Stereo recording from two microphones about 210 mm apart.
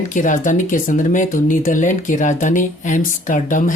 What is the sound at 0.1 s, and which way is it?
A woman's voice, 40° left (ahead or behind).